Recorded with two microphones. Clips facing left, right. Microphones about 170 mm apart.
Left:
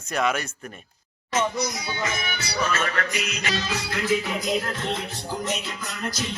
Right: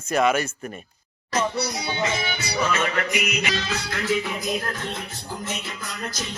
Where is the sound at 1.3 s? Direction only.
35° right (ahead or behind); by 3.5 s 15° right (ahead or behind).